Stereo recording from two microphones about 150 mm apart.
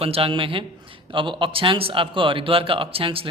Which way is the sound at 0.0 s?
40° right (ahead or behind).